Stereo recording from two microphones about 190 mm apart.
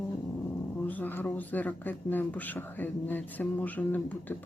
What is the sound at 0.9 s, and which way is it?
Speech, 10° left (ahead or behind).